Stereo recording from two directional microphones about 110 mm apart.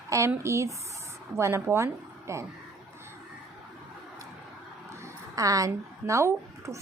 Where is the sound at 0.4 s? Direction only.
25° right (ahead or behind).